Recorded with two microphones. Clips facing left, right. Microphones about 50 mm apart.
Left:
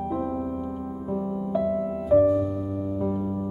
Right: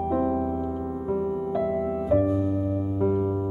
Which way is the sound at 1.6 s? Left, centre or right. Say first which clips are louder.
Left 1 dB; centre.